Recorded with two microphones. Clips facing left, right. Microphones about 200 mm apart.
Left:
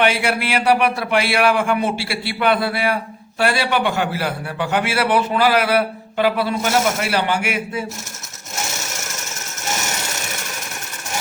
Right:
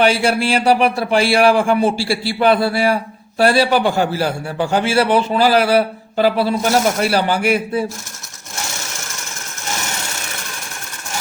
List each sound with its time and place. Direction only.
0.0 s a man's voice: 30° right (ahead or behind)